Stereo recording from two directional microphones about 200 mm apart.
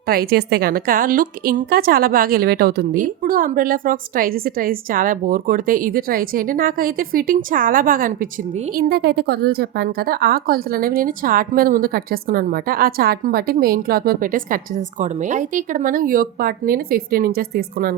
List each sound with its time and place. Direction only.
0.1 s a woman's voice: 50° right (ahead or behind)